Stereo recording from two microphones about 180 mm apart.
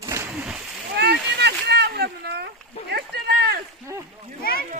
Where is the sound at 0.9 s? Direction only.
65° right (ahead or behind).